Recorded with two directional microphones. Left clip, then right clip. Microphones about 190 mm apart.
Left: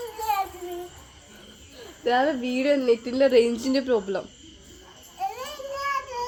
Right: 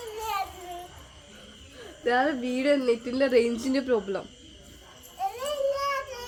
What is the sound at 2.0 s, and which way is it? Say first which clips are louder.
A woman's voice: left 2 dB; 20° left (ahead or behind).